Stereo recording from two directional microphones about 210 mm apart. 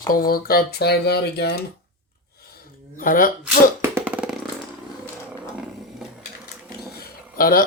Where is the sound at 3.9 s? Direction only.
5° right (ahead or behind).